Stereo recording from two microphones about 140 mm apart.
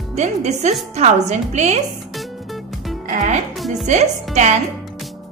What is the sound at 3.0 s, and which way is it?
Speech, 60° right (ahead or behind).